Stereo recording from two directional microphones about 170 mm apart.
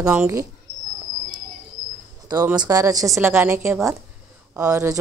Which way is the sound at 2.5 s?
20° right (ahead or behind).